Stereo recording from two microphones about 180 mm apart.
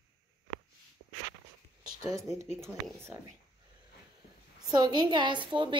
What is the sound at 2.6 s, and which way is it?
Speech, 15° right (ahead or behind).